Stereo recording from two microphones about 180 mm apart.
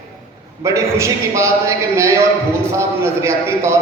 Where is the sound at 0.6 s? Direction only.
15° right (ahead or behind).